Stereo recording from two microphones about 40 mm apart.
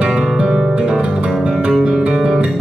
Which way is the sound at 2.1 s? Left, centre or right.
Centre.